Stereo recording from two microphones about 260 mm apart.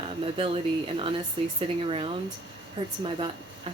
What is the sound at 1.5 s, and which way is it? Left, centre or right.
Speech, right.